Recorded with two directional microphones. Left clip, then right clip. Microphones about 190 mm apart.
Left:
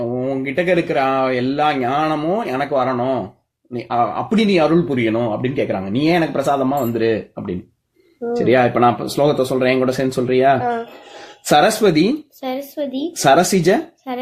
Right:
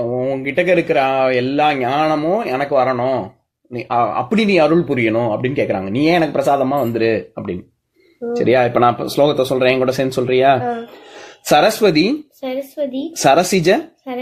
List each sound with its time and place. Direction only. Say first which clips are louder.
0.2 s speech: right 2 dB; 30° right (ahead or behind)
12.4 s speech: right 2 dB; 35° left (ahead or behind)
13.1 s speech: right 1 dB; 30° right (ahead or behind)